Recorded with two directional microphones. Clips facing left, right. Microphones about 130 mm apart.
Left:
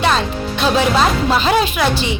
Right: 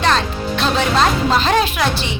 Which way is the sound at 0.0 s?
5° left (ahead or behind).